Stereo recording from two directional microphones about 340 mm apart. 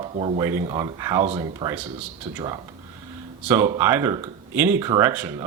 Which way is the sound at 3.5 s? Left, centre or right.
Centre.